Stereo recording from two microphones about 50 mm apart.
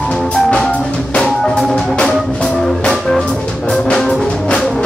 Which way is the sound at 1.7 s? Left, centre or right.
Centre.